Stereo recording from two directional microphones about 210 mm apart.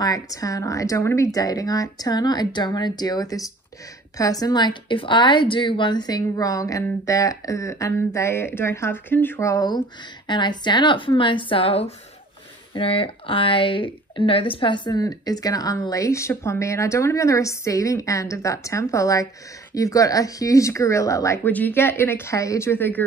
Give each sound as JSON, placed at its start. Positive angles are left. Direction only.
{"t": 0.0, "sound": "speech", "side_deg": 15}